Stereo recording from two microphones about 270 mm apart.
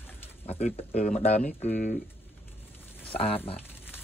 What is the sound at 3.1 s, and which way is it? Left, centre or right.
Speech, left.